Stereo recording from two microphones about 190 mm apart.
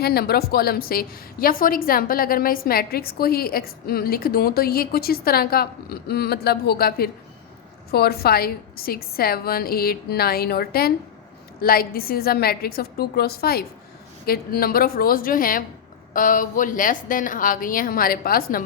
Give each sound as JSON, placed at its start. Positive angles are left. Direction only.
{"t": 0.0, "sound": "a woman's voice", "side_deg": 55}